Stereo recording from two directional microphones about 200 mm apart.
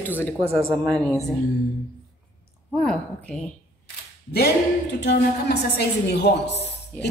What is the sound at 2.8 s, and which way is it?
Speech, 5° left (ahead or behind).